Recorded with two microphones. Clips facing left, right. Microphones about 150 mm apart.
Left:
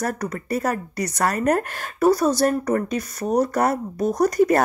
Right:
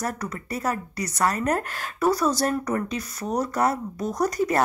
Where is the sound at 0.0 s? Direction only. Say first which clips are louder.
Left 4 dB; 55° left (ahead or behind).